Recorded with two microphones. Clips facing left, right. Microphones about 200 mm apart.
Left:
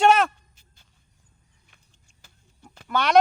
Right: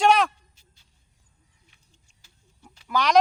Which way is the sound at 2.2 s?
50° left (ahead or behind).